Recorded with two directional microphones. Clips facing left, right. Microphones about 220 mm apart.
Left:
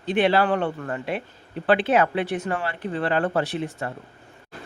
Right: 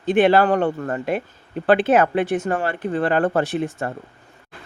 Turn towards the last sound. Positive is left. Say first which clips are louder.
# right 4 dB
turn(degrees=-50)  # may be behind; listen again after turning